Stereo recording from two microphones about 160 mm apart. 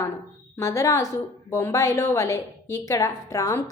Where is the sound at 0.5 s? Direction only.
20° left (ahead or behind).